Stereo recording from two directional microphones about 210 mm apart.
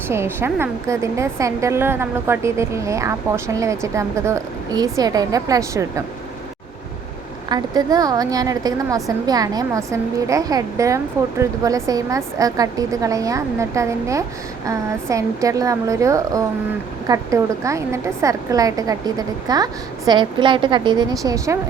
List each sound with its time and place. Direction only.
0.1 s a woman's voice: 10° right (ahead or behind)
7.5 s a woman's voice: 20° right (ahead or behind)